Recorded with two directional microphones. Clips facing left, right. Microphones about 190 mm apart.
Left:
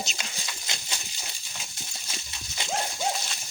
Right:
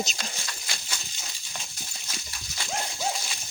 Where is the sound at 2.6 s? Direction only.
20° left (ahead or behind).